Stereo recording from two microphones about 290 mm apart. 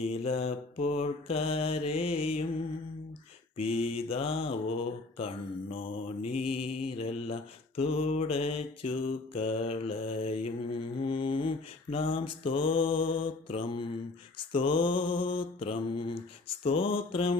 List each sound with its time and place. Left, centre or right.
0.0 s mantra: centre
3.6 s mantra: centre